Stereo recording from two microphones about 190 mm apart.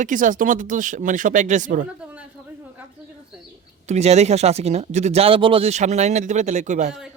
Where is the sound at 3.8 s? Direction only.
35° right (ahead or behind).